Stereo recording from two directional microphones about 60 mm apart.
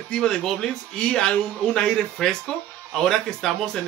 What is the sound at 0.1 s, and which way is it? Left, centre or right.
A man's voice, centre.